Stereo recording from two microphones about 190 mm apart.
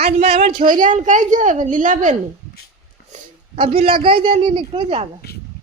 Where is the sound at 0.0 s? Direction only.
35° right (ahead or behind).